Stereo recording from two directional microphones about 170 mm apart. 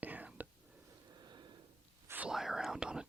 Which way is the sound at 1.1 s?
25° right (ahead or behind).